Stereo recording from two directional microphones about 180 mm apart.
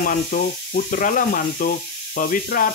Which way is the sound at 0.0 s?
50° left (ahead or behind).